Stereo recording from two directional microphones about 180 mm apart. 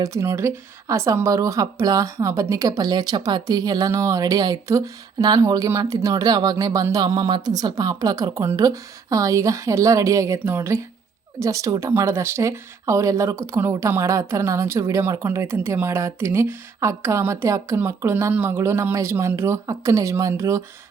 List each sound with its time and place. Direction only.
0.0 s speech: 15° right (ahead or behind)